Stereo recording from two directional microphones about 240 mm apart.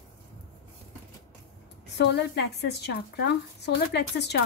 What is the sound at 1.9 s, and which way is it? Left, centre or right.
Speech, left.